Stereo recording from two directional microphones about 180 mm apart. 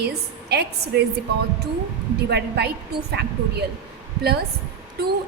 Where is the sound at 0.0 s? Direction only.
65° right (ahead or behind).